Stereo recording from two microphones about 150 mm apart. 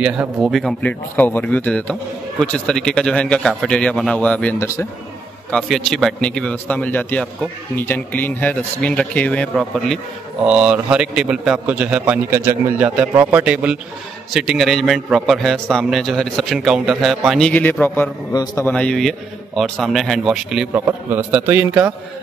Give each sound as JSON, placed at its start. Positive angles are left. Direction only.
{"t": 0.0, "sound": "a man's voice", "side_deg": -5}
{"t": 1.1, "sound": "a man's voice", "side_deg": 10}
{"t": 10.4, "sound": "a man's voice", "side_deg": -5}
{"t": 18.3, "sound": "a man's voice", "side_deg": 25}
{"t": 18.7, "sound": "a man's voice", "side_deg": 5}
{"t": 20.7, "sound": "a man's voice", "side_deg": -15}